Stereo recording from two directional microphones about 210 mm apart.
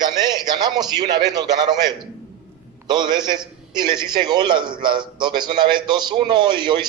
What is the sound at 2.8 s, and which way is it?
A man's voice, 20° right (ahead or behind).